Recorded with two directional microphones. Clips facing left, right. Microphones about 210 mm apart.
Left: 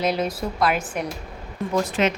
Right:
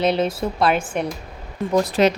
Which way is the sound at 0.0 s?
30° right (ahead or behind).